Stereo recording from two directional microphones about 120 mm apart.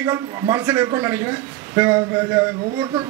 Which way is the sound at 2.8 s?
40° right (ahead or behind).